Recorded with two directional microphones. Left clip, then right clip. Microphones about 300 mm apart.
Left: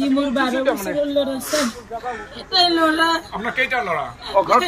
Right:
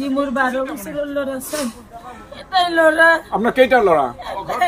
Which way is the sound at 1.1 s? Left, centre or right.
Centre.